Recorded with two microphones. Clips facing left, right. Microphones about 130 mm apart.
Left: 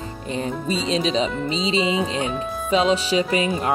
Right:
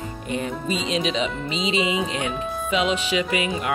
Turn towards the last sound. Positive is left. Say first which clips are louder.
# left 3 dB
turn(degrees=35)  # may be behind; listen again after turning